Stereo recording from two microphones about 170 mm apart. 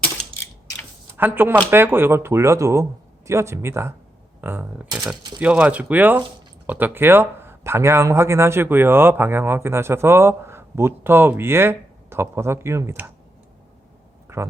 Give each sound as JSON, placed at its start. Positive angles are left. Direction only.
{"t": 1.1, "sound": "speech", "side_deg": -10}
{"t": 14.3, "sound": "speech", "side_deg": -15}